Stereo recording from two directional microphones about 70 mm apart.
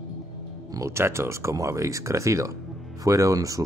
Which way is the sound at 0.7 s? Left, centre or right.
Right.